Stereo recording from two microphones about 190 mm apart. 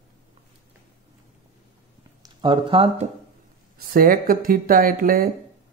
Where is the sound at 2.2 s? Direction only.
25° right (ahead or behind).